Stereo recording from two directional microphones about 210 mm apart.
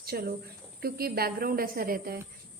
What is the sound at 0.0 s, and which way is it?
A woman's voice, 45° right (ahead or behind).